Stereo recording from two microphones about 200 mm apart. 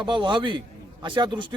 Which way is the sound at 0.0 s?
25° right (ahead or behind).